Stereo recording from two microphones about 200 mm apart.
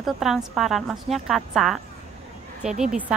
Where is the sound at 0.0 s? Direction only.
Centre (ahead or behind).